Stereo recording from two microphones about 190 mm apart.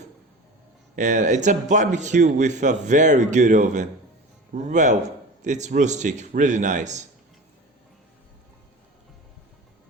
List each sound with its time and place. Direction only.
0.9 s a man's voice: 40° right (ahead or behind)